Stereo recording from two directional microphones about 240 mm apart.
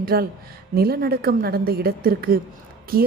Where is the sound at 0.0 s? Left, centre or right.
Right.